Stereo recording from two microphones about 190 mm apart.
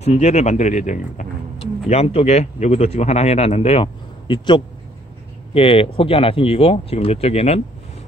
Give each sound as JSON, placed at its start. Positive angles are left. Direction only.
{"t": 0.0, "sound": "a man's voice", "side_deg": 35}